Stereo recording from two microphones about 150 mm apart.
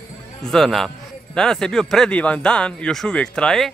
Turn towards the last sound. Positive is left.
turn(degrees=5)  # may be behind; listen again after turning